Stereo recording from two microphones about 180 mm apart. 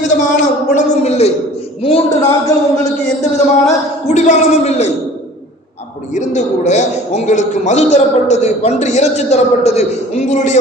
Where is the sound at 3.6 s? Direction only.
40° left (ahead or behind).